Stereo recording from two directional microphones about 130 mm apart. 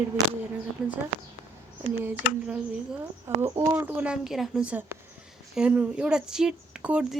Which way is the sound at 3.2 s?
20° right (ahead or behind).